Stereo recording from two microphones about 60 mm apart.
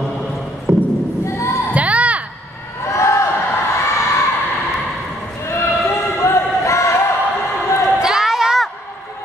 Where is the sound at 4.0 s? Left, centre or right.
Left.